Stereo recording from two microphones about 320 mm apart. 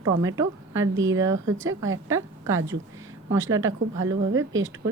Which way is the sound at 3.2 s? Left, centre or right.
Right.